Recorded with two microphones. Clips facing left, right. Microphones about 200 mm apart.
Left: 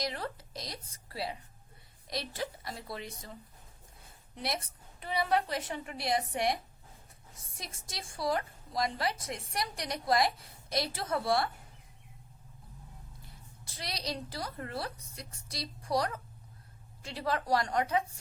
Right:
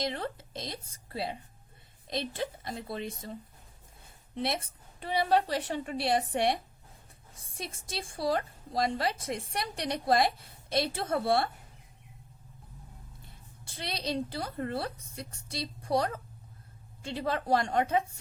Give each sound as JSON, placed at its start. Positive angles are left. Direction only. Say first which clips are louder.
{"t": 0.0, "sound": "a woman's voice", "louder": "right 3 dB", "side_deg": -25}
{"t": 4.4, "sound": "a woman's voice", "louder": "right 4 dB", "side_deg": -30}
{"t": 13.7, "sound": "a woman's voice", "louder": "right 4 dB", "side_deg": -25}